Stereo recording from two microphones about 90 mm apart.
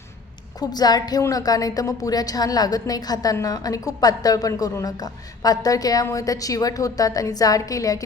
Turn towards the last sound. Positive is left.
turn(degrees=40)  # may be behind; listen again after turning